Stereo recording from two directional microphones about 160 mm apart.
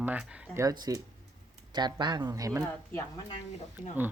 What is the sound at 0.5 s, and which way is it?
Speech, 25° right (ahead or behind).